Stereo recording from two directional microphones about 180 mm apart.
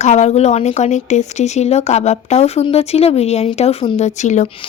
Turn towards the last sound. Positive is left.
turn(degrees=40)  # may be behind; listen again after turning